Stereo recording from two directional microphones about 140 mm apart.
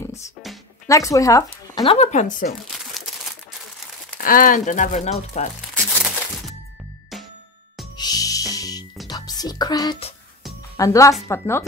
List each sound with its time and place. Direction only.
0.8 s speech: 25° left (ahead or behind)
1.9 s speech: 55° left (ahead or behind)
2.7 s crumpling: centre (ahead or behind)
4.2 s speech: 85° left; by 5.5 s 55° left (ahead or behind)
5.8 s crumpling: 5° left (ahead or behind)
8.0 s music: 25° left (ahead or behind)
10.8 s speech: 25° left (ahead or behind)